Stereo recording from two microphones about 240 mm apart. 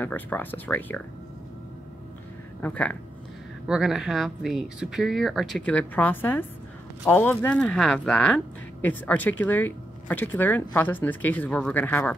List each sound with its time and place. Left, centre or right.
0.0 s speech: centre
2.6 s speech: centre